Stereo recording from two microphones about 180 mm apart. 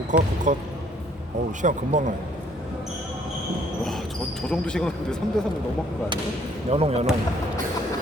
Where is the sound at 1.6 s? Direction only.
45° right (ahead or behind).